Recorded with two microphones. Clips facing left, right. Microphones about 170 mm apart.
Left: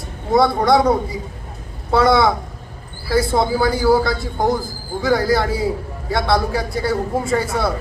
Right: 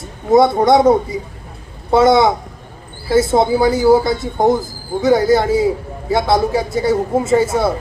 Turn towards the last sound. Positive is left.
turn(degrees=-25)  # may be behind; listen again after turning